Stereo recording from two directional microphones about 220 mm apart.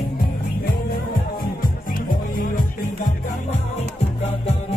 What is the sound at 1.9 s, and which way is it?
Music, 40° left (ahead or behind).